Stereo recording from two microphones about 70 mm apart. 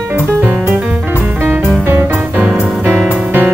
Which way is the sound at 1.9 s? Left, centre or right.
Right.